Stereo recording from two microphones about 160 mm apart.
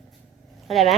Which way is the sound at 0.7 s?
Centre (ahead or behind).